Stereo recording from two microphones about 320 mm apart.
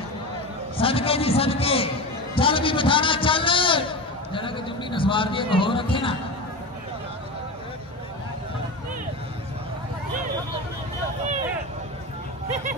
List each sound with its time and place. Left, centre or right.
0.7 s a man's voice: centre